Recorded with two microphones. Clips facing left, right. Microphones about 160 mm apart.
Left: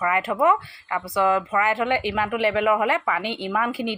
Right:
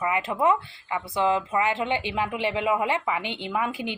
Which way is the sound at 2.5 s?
65° left (ahead or behind).